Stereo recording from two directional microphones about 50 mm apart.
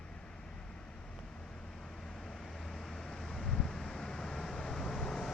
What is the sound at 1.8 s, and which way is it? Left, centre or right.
Vehicle, centre.